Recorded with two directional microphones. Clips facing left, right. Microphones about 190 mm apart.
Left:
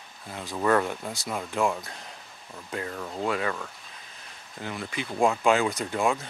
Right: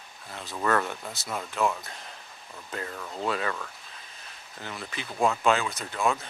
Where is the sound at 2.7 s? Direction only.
25° left (ahead or behind).